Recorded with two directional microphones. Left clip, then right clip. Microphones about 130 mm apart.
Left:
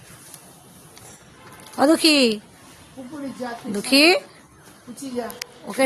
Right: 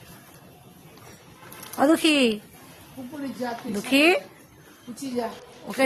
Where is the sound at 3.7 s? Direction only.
45° left (ahead or behind).